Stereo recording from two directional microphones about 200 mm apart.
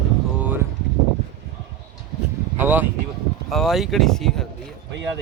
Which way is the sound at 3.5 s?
Centre (ahead or behind).